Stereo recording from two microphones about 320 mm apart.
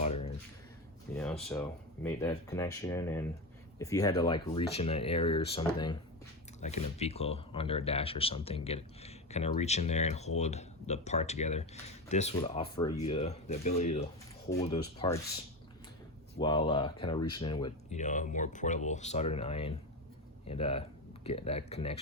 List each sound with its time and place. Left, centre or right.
0.0 s a sound: centre
1.1 s speech: centre
16.4 s speech: centre